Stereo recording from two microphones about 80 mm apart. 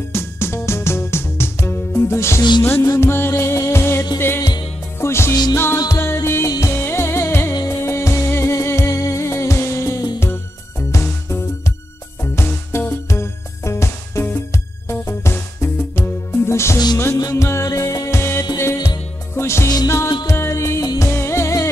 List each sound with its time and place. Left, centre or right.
0.1 s music: left
16.7 s music: left
17.3 s music: left